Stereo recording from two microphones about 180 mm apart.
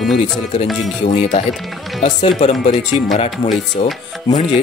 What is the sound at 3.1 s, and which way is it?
Speech, 35° left (ahead or behind).